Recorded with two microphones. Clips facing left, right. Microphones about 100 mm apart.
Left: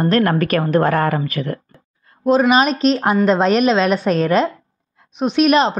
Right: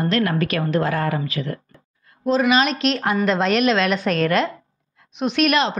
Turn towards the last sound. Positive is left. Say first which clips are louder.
# left 5 dB
turn(degrees=40)  # may be behind; listen again after turning